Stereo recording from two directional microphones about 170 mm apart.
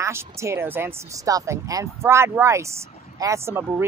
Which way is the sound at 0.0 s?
15° right (ahead or behind).